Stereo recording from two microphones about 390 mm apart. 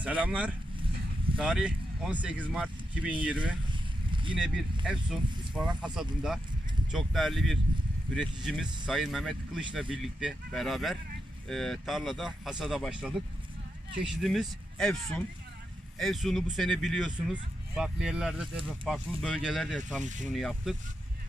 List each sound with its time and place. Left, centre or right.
0.0 s speech: centre
4.9 s speech: centre
16.0 s speech: centre
20.0 s speech: centre
20.2 s speech: centre